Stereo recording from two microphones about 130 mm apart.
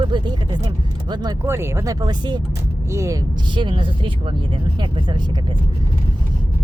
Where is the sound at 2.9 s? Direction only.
25° right (ahead or behind).